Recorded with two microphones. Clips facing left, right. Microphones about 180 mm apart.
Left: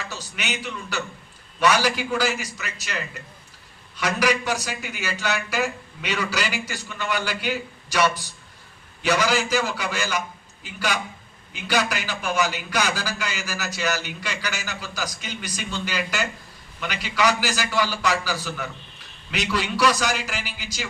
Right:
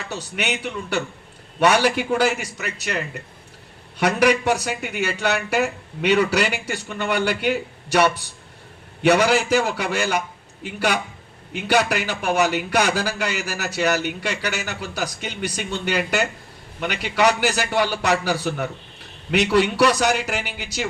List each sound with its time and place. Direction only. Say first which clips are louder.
0.0 s a man's voice: right 6 dB; 60° right (ahead or behind)